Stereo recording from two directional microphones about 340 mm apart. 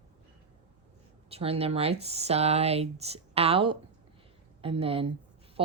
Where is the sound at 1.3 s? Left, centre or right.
Centre.